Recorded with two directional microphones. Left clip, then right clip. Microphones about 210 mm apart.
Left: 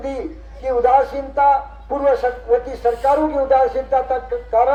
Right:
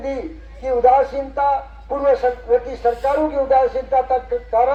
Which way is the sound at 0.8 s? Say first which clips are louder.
Right 1 dB; 40° right (ahead or behind).